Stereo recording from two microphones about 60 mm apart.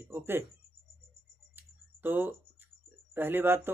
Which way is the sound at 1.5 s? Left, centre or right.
Right.